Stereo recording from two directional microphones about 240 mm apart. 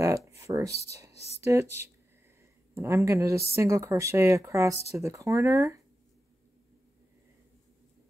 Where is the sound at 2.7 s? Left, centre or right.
Centre.